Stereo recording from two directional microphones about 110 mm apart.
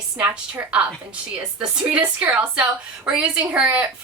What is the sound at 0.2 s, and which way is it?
Speech, 15° right (ahead or behind).